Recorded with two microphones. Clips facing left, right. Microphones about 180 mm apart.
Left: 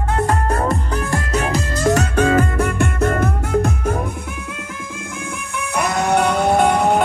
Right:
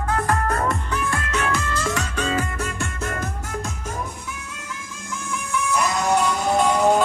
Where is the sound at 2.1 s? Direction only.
55° left (ahead or behind).